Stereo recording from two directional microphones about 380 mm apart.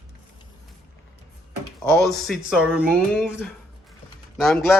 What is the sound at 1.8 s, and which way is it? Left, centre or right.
Speech, centre.